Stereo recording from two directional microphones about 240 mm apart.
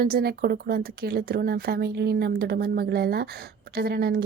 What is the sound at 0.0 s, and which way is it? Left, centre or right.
Speech, right.